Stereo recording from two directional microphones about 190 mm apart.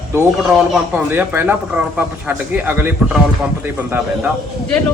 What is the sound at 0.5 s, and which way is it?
Speech, 5° right (ahead or behind).